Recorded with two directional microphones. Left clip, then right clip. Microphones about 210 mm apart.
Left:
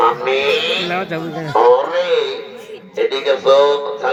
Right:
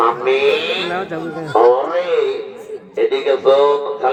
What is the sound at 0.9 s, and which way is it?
Speech, 40° left (ahead or behind).